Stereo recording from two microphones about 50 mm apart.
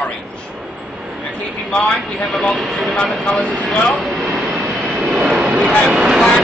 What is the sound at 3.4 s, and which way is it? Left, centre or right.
Speech, right.